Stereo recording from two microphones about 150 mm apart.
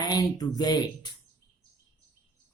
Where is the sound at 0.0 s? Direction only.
25° left (ahead or behind).